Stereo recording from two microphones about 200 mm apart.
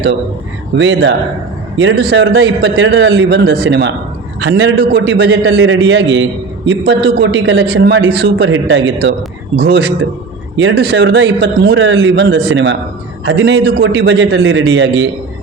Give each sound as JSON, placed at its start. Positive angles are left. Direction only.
{"t": 0.8, "sound": "a man's voice", "side_deg": -65}
{"t": 8.4, "sound": "a man's voice", "side_deg": -70}